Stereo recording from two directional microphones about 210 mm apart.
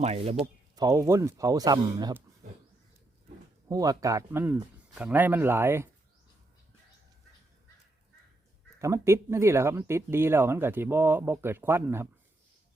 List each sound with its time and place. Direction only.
0.0 s speech: 30° right (ahead or behind)
0.8 s speech: 15° right (ahead or behind)
3.7 s speech: 15° right (ahead or behind)
8.8 s speech: 15° right (ahead or behind)